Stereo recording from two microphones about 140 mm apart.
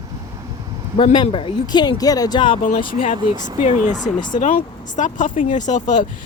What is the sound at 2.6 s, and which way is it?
Speech, 75° left (ahead or behind).